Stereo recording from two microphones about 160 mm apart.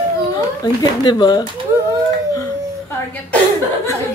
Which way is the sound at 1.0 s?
25° left (ahead or behind).